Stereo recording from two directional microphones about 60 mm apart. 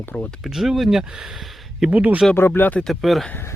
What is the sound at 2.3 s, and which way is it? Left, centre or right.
Speech, left.